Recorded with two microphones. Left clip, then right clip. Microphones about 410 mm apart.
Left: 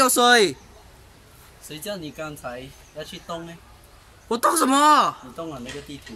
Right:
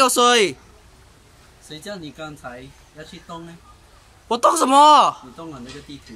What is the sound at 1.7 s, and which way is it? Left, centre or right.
Speech, centre.